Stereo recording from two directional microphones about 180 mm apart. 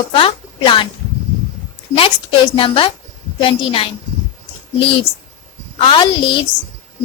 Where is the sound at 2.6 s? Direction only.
30° left (ahead or behind).